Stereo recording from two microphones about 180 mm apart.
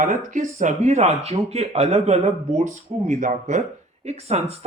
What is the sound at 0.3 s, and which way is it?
Speech, 40° right (ahead or behind).